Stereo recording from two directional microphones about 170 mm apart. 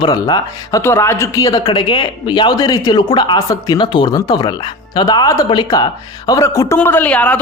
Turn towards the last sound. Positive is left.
turn(degrees=10)  # may be behind; listen again after turning